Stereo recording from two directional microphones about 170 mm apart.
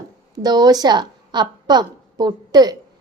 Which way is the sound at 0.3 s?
25° right (ahead or behind).